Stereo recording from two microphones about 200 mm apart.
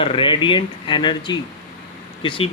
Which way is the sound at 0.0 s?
25° left (ahead or behind).